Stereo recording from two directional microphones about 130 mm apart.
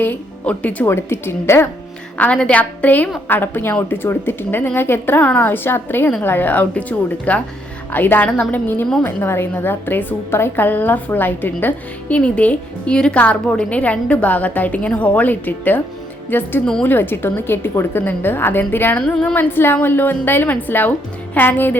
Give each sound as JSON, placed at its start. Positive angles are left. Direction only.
{"t": 0.0, "sound": "a woman's voice", "side_deg": 10}